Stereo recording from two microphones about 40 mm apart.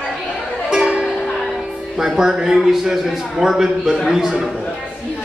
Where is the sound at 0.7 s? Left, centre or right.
Right.